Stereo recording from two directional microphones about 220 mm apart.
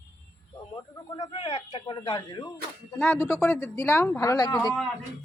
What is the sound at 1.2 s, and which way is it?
Speech, 25° left (ahead or behind).